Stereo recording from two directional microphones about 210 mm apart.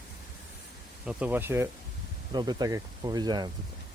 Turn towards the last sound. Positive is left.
turn(degrees=-20)  # may be behind; listen again after turning